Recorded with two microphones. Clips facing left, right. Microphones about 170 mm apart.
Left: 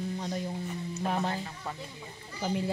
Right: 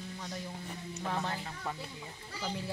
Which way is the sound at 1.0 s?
20° left (ahead or behind).